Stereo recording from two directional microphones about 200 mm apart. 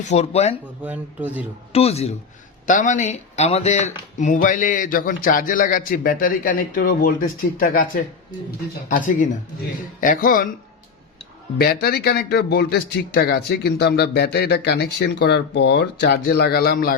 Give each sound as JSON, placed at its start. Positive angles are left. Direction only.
{"t": 0.0, "sound": "speech", "side_deg": 35}
{"t": 0.9, "sound": "speech", "side_deg": -10}
{"t": 1.7, "sound": "speech", "side_deg": 30}
{"t": 11.5, "sound": "speech", "side_deg": 50}